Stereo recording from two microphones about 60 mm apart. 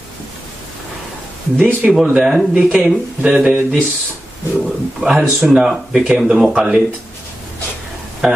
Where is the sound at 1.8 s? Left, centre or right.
Centre.